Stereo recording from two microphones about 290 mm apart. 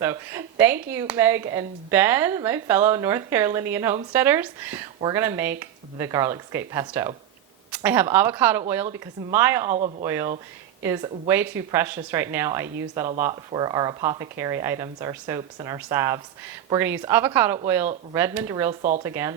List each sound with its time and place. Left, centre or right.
0.0 s speech: centre
18.8 s speech: right
19.0 s speech: centre